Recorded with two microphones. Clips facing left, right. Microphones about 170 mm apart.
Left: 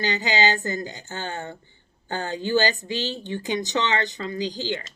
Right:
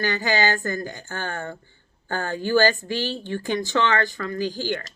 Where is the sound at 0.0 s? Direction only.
20° left (ahead or behind).